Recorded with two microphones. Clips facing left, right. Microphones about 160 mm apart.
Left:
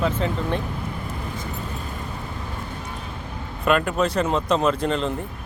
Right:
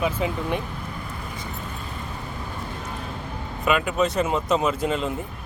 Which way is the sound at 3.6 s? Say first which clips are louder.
Left 1 dB; 5° right (ahead or behind).